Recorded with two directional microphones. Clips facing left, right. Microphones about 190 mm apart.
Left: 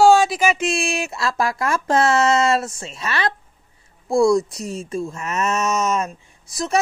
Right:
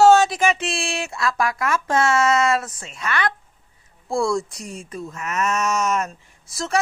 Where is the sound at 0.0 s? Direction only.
10° left (ahead or behind).